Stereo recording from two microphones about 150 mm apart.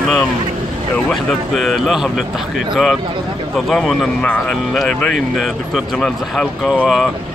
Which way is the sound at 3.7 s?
Centre (ahead or behind).